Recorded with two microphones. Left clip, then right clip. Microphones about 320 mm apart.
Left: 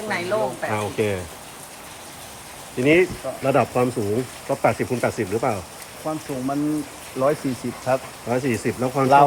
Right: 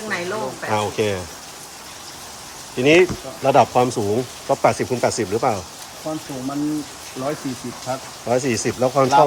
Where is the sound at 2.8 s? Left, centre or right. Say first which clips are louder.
Right 3 dB; centre.